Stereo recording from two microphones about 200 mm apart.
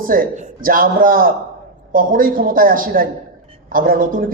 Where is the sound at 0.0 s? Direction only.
45° right (ahead or behind).